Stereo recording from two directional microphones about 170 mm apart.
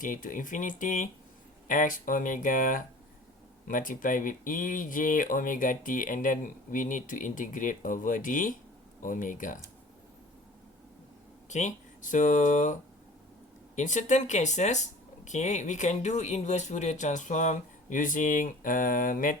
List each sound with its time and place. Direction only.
0.0 s speech: 50° left (ahead or behind)
11.4 s speech: 45° left (ahead or behind)
13.7 s speech: 45° left (ahead or behind)